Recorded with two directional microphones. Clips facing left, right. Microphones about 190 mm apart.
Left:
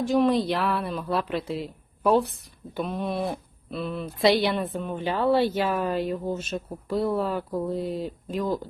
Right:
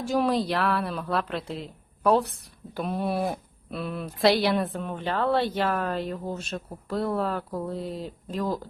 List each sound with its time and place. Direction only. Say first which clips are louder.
0.0 s speech: left 3 dB; centre (ahead or behind)